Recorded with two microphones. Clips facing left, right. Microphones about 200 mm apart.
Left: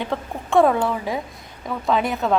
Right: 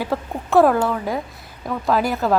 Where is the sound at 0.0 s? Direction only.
5° right (ahead or behind).